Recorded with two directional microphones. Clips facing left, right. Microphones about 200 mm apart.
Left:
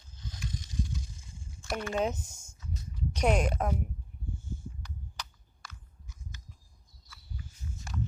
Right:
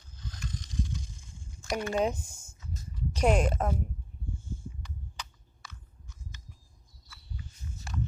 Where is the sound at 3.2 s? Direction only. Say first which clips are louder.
Right 2 dB; 10° left (ahead or behind).